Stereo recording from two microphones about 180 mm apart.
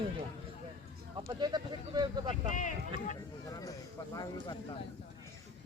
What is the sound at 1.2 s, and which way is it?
Speech, 20° right (ahead or behind).